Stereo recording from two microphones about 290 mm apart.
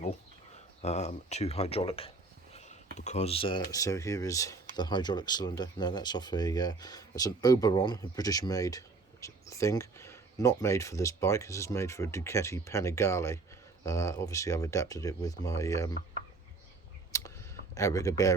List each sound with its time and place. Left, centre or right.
0.8 s speech: left
17.1 s computer keyboard: centre